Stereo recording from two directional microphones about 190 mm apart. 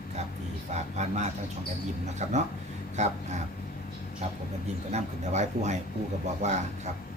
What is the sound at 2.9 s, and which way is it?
Speech, 35° right (ahead or behind).